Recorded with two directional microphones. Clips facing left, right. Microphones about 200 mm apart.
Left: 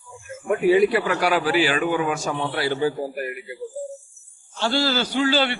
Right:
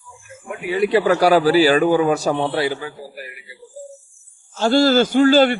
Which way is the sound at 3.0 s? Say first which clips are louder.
Left 8 dB; 50° left (ahead or behind).